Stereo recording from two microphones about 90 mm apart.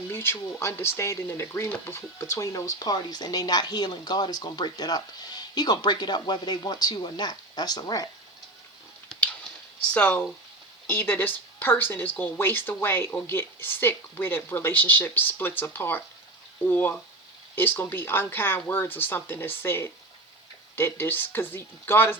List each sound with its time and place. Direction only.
0.1 s speech: 25° left (ahead or behind); by 8.1 s 45° left (ahead or behind)
9.9 s speech: 15° left (ahead or behind)